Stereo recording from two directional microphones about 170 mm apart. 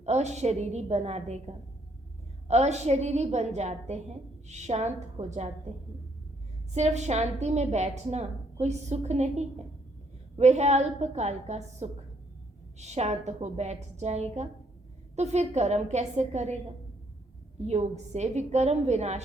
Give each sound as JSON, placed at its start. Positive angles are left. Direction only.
{"t": 0.0, "sound": "a woman's voice", "side_deg": -40}
{"t": 6.7, "sound": "a woman's voice", "side_deg": -40}
{"t": 17.7, "sound": "a woman's voice", "side_deg": -40}